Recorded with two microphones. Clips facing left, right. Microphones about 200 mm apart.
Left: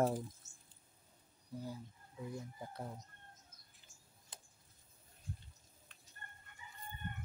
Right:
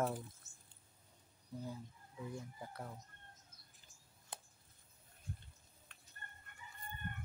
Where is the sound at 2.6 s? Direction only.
20° left (ahead or behind).